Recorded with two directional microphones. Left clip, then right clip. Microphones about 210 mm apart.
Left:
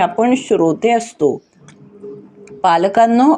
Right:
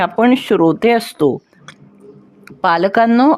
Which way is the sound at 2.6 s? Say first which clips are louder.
Left 1 dB; 40° right (ahead or behind).